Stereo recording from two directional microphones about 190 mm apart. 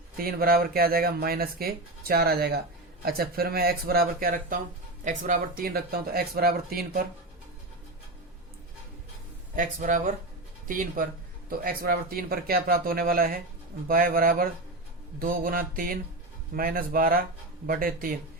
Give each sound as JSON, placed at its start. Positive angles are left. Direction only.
{"t": 0.2, "sound": "speech", "side_deg": -50}
{"t": 9.6, "sound": "speech", "side_deg": -45}